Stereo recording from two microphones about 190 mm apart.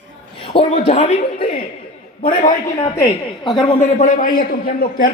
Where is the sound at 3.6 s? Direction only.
30° left (ahead or behind); by 5.1 s 50° left (ahead or behind).